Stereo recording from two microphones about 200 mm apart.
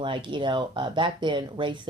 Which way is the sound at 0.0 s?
25° right (ahead or behind).